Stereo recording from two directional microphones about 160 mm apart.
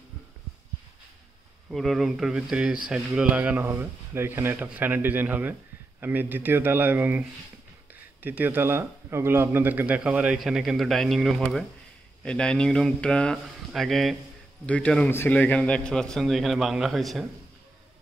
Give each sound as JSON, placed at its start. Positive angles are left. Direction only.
{"t": 1.7, "sound": "a man's voice", "side_deg": 0}